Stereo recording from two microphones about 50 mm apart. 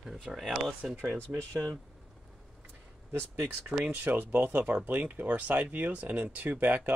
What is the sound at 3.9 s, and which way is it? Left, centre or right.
Speech, right.